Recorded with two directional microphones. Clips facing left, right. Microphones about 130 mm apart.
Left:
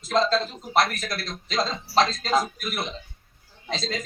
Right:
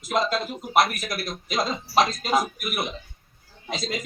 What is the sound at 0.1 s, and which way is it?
Speech, 15° right (ahead or behind).